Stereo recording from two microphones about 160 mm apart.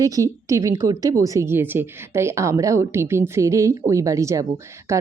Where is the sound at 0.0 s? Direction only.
20° right (ahead or behind).